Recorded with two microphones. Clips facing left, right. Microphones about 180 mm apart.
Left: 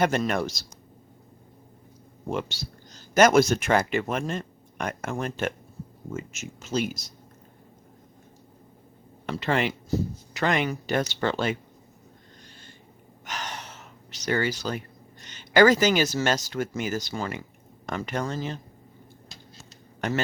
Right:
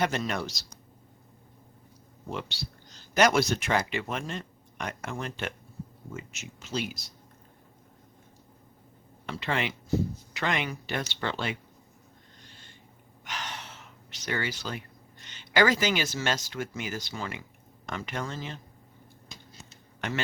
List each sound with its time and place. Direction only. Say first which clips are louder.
0.0 s speech: left 5 dB; 50° left (ahead or behind)
2.2 s speech: left 6 dB; 50° left (ahead or behind)
9.2 s speech: left 5 dB; 45° left (ahead or behind)
13.2 s speech: left 3 dB; 40° left (ahead or behind)
20.0 s speech: left 5 dB; 40° left (ahead or behind)